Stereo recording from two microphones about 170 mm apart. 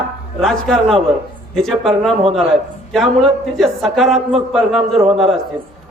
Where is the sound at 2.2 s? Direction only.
35° right (ahead or behind).